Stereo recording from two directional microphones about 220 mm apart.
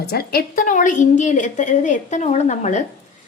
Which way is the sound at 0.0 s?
45° left (ahead or behind).